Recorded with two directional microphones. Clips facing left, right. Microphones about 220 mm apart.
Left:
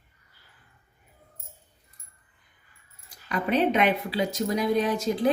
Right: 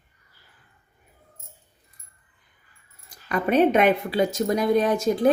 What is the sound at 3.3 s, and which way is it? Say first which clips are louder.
Speech: right 5 dB; 50° right (ahead or behind).